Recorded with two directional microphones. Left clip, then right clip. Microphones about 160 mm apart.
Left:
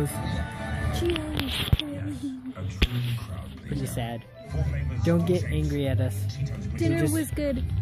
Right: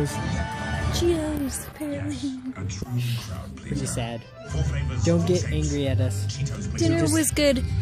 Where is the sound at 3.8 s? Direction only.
20° left (ahead or behind).